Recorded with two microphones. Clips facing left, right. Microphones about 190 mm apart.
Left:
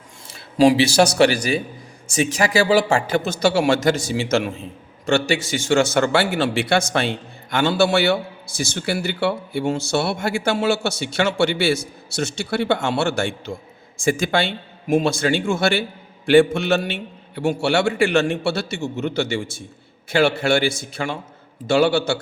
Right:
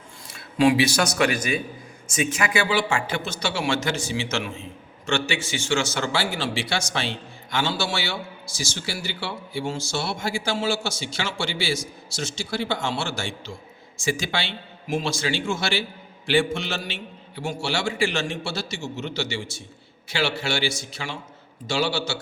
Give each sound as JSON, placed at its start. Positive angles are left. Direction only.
{"t": 0.3, "sound": "speech", "side_deg": 30}
{"t": 5.7, "sound": "a man's voice", "side_deg": 55}